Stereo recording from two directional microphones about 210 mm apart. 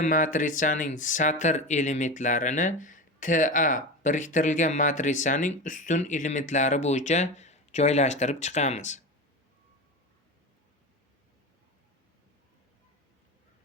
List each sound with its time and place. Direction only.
0.0 s speech: 40° left (ahead or behind)